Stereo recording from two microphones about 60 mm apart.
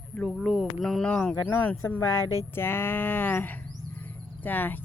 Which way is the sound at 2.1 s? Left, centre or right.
Left.